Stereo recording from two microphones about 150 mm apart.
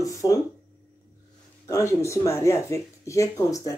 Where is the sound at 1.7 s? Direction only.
20° left (ahead or behind).